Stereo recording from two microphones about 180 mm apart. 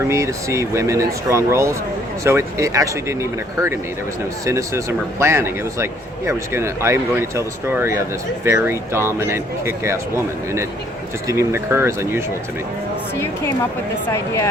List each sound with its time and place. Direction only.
0.0 s speech: 15° right (ahead or behind)
11.3 s speech: 15° right (ahead or behind)